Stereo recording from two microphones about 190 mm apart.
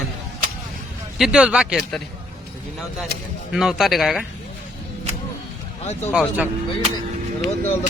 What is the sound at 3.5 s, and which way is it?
Speech, centre (ahead or behind).